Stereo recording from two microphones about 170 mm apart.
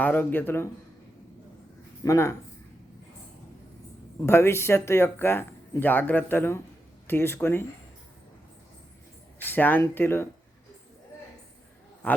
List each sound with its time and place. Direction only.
0.0 s speech: 10° left (ahead or behind)
2.0 s speech: 15° left (ahead or behind)
4.3 s speech: 15° left (ahead or behind)
9.5 s speech: 10° left (ahead or behind)